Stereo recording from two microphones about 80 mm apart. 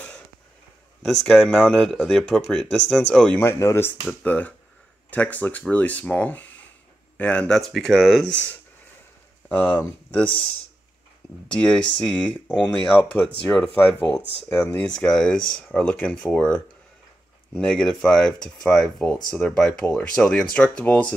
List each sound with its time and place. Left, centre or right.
1.0 s speech: centre
3.1 s speech: centre
3.5 s speech: left
4.1 s speech: centre
9.5 s speech: centre
11.4 s speech: centre